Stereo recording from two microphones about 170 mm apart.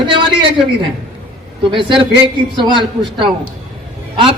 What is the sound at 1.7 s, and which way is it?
A woman's voice, 30° right (ahead or behind).